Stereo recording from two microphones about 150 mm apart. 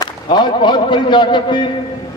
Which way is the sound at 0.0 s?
30° left (ahead or behind).